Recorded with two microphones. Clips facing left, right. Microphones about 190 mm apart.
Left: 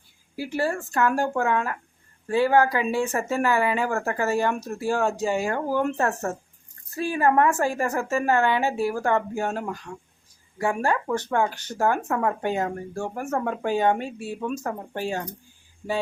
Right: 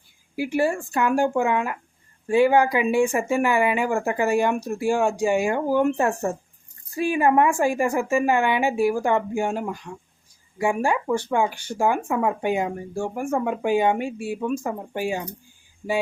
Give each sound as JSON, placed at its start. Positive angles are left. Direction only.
{"t": 0.3, "sound": "speech", "side_deg": -15}